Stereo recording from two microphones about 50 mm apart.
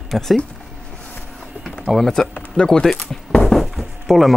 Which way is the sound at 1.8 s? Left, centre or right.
Centre.